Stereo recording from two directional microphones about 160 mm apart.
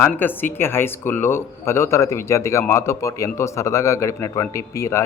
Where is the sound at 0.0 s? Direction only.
10° left (ahead or behind).